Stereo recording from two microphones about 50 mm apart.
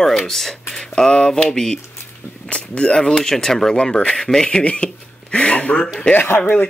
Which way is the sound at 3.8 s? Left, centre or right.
Left.